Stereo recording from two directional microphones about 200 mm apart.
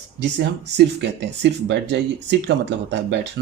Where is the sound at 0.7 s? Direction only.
60° right (ahead or behind).